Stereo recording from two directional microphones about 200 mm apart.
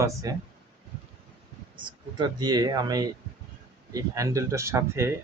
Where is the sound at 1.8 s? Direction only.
20° right (ahead or behind).